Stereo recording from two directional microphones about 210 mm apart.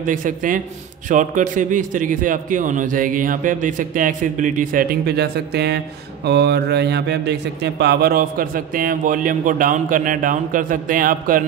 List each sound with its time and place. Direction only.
0.0 s speech: 40° right (ahead or behind)